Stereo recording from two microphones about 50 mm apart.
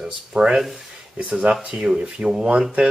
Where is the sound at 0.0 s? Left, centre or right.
Centre.